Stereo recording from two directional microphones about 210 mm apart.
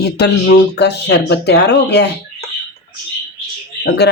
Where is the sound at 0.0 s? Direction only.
50° left (ahead or behind).